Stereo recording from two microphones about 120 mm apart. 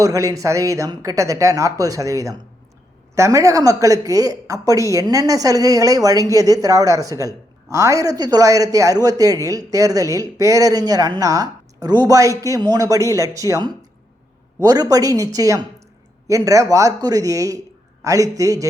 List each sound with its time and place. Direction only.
0.0 s speech: 30° right (ahead or behind)